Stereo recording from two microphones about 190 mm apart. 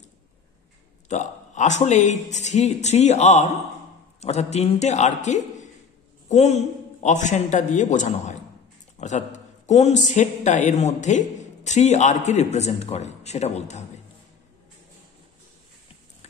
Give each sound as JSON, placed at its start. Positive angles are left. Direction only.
{"t": 1.0, "sound": "speech", "side_deg": 40}